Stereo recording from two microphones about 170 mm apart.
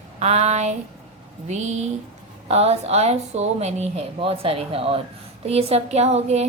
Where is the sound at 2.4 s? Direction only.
35° right (ahead or behind).